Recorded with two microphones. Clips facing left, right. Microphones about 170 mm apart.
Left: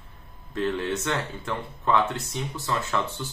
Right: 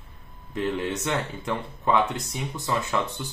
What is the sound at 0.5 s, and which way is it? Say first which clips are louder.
Speech: even; 15° right (ahead or behind).